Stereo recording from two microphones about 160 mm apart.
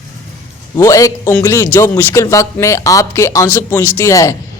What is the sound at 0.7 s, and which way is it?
A man's voice, 20° left (ahead or behind).